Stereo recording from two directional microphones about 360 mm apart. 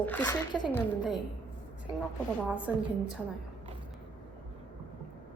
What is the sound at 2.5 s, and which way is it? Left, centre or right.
Speech, centre.